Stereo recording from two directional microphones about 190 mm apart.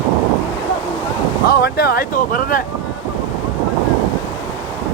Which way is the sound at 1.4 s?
55° left (ahead or behind).